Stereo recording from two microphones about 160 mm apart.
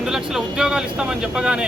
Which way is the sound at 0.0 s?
5° right (ahead or behind).